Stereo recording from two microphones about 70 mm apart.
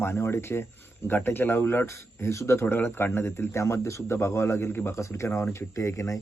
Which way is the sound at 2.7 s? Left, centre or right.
Left.